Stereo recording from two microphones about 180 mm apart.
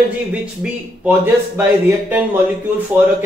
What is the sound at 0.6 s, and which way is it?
Speech, 10° right (ahead or behind).